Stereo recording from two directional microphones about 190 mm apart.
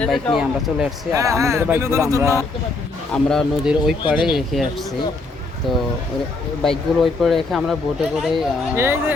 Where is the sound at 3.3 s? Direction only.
5° right (ahead or behind).